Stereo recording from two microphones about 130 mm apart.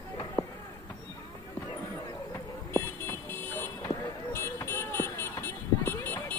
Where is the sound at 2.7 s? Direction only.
15° left (ahead or behind).